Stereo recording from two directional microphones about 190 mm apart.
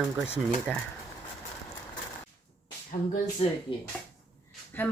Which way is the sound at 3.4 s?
35° left (ahead or behind).